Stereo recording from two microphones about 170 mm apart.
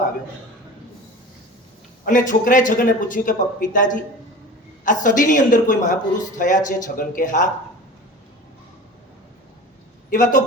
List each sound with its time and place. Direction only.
2.0 s speech: 50° left (ahead or behind)
10.1 s speech: 50° left (ahead or behind)